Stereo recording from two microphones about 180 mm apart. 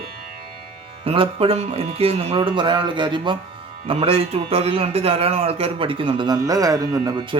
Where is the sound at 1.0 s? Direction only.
30° right (ahead or behind).